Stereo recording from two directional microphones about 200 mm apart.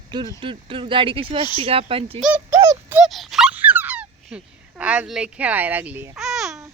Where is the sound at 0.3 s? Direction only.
25° right (ahead or behind).